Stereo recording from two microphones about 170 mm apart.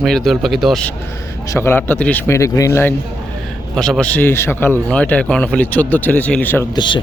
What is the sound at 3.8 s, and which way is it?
Speech, 5° left (ahead or behind).